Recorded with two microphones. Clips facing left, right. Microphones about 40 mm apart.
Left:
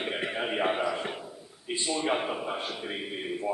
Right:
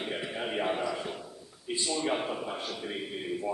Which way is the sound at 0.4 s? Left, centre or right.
Left.